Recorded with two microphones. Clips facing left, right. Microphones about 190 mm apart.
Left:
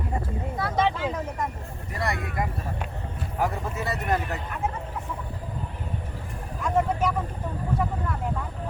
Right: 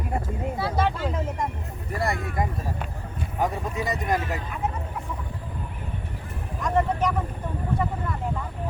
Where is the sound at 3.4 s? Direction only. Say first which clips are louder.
Right 1 dB; 15° right (ahead or behind).